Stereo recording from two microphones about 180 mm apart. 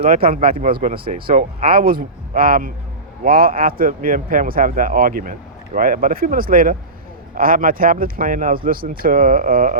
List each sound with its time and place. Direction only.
0.0 s speech: 35° right (ahead or behind)
0.4 s speech: 50° right (ahead or behind)
1.7 s speech: 55° right (ahead or behind)